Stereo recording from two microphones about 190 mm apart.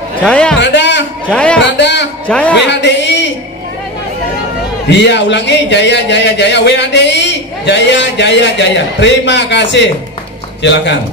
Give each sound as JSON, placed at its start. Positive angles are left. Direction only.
{"t": 0.2, "sound": "a man's voice", "side_deg": 5}
{"t": 0.6, "sound": "a sound", "side_deg": 70}
{"t": 1.3, "sound": "a man's voice", "side_deg": 5}
{"t": 1.8, "sound": "a man's voice", "side_deg": 65}
{"t": 2.2, "sound": "a man's voice", "side_deg": 5}
{"t": 2.5, "sound": "music", "side_deg": 65}
{"t": 4.8, "sound": "a man's voice", "side_deg": 65}